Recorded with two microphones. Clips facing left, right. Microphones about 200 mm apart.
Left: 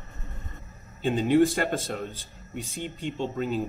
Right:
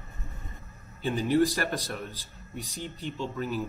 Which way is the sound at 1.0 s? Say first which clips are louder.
Left 3 dB; 20° left (ahead or behind).